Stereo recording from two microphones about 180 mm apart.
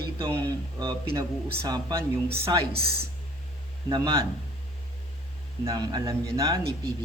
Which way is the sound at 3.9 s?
25° right (ahead or behind).